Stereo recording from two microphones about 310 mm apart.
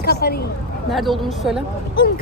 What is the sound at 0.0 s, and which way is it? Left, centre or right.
Speech, left.